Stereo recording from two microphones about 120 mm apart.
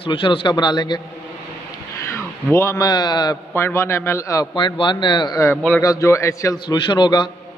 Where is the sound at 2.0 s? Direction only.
20° left (ahead or behind).